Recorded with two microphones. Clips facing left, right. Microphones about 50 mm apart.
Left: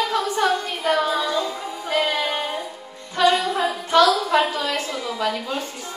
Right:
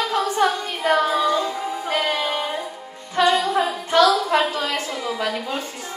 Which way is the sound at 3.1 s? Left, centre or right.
Right.